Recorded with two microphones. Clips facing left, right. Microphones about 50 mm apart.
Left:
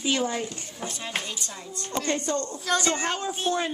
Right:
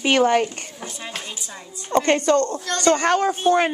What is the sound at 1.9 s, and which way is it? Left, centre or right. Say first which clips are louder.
A woman's voice: right 10 dB; right.